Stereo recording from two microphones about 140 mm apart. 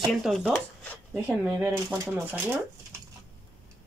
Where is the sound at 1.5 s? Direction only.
25° right (ahead or behind).